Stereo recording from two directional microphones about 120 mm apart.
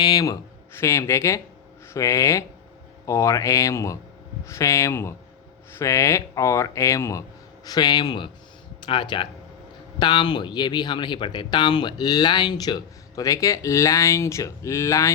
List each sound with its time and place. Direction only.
0.0 s speech: 30° left (ahead or behind)